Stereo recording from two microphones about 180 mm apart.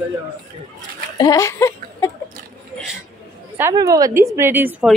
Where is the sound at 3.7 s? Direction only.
20° right (ahead or behind).